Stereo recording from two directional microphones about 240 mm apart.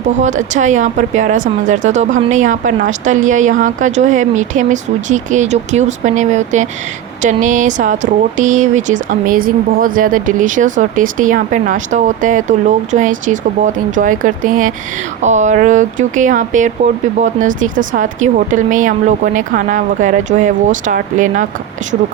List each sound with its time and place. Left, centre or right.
0.2 s speech: right